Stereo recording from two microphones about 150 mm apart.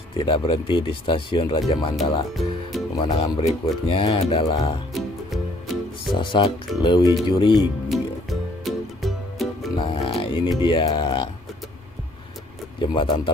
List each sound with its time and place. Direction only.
0.2 s speech: 35° left (ahead or behind)
4.9 s music: centre (ahead or behind)
6.1 s speech: 35° left (ahead or behind)
7.9 s music: centre (ahead or behind)
9.8 s music: 35° left (ahead or behind)
10.6 s speech: 35° left (ahead or behind)
12.7 s speech: 35° left (ahead or behind)